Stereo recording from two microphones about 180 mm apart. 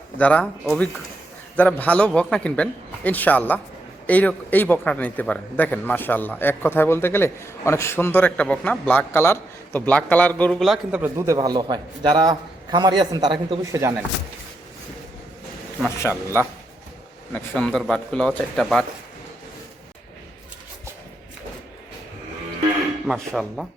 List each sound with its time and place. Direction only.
0.2 s a man's voice: 5° left (ahead or behind); by 14.0 s 15° right (ahead or behind)
17.3 s a man's voice: 5° left (ahead or behind)
23.0 s a man's voice: centre (ahead or behind)